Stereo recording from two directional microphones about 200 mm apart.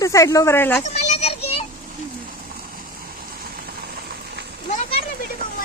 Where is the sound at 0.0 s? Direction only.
15° left (ahead or behind).